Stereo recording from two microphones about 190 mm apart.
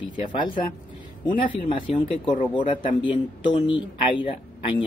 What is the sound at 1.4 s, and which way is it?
Speech, 25° left (ahead or behind).